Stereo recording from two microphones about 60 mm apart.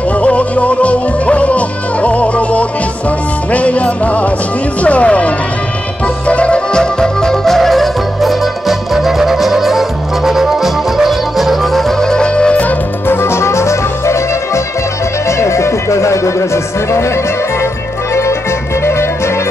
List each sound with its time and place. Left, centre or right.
0.2 s music: left; by 11.8 s centre
12.0 s music: centre
13.1 s music: left
18.9 s music: left